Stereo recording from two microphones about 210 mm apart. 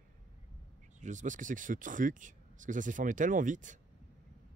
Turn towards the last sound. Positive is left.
turn(degrees=-35)  # may be behind; listen again after turning